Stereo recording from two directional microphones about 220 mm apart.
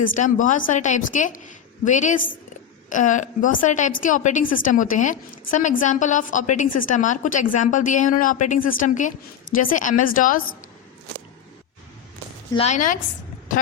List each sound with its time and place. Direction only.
0.2 s a woman's voice: 35° left (ahead or behind)
12.5 s a woman's voice: 30° left (ahead or behind)